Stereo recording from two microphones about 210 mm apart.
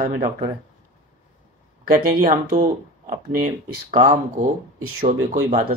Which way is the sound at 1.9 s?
40° right (ahead or behind).